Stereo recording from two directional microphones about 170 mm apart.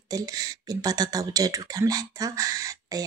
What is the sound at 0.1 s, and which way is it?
Speech, 20° right (ahead or behind).